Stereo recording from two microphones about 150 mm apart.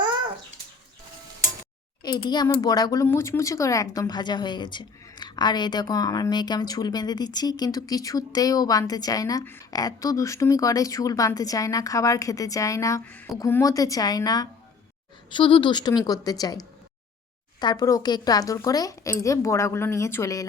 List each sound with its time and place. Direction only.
2.0 s speech: 30° left (ahead or behind)
13.1 s speech: 10° left (ahead or behind)
13.5 s speech: 20° left (ahead or behind)